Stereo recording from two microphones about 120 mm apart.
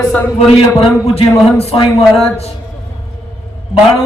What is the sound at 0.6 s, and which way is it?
A man's voice, 55° left (ahead or behind).